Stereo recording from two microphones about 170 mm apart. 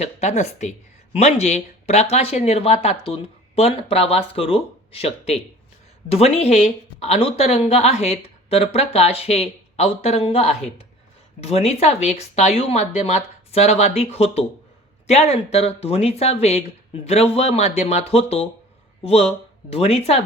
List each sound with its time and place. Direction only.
0.0 s speech: 40° left (ahead or behind)
11.3 s speech: 40° left (ahead or behind)